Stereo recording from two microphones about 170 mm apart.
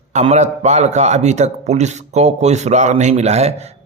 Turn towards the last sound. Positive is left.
turn(degrees=-40)  # may be behind; listen again after turning